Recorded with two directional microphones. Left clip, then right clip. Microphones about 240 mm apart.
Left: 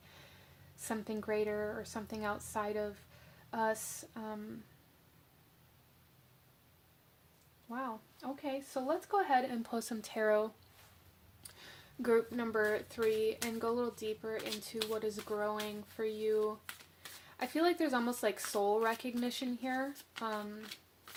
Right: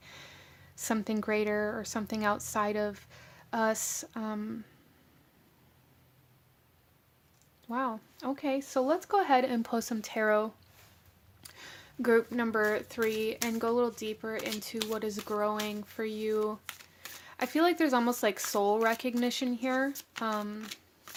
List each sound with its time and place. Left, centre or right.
0.9 s speech: right
7.7 s speech: right